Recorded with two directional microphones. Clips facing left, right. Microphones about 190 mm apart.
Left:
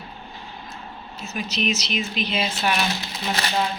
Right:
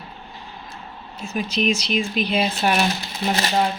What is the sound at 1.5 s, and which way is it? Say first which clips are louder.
Speech: right 4 dB; 50° right (ahead or behind).